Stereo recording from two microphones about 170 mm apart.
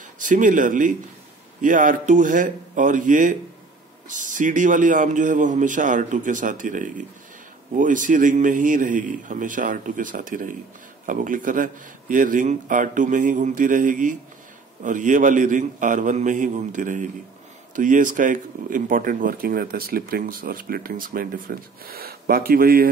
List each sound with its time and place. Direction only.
0.2 s a man's voice: 50° right (ahead or behind)